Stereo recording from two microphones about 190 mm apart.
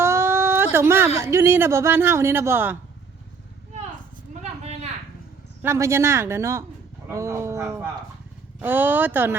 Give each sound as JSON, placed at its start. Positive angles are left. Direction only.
{"t": 0.0, "sound": "speech", "side_deg": -15}
{"t": 4.4, "sound": "a sound", "side_deg": -35}
{"t": 5.6, "sound": "speech", "side_deg": -15}